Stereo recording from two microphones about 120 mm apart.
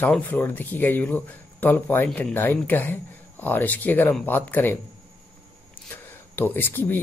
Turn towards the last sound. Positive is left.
turn(degrees=15)  # may be behind; listen again after turning